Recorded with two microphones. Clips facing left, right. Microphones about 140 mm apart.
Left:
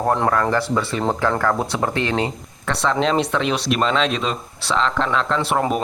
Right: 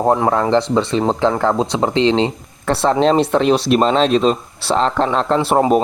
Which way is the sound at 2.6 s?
35° right (ahead or behind).